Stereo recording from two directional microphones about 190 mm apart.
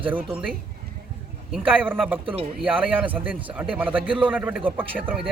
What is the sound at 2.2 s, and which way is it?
Speech, 30° right (ahead or behind).